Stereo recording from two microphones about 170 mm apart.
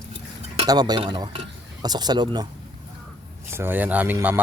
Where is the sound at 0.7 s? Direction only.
25° right (ahead or behind).